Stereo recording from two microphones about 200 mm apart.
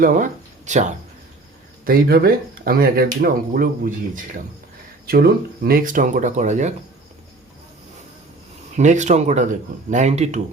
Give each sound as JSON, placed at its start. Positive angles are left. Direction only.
{"t": 0.0, "sound": "speech", "side_deg": -40}
{"t": 1.8, "sound": "speech", "side_deg": -45}
{"t": 8.7, "sound": "speech", "side_deg": -35}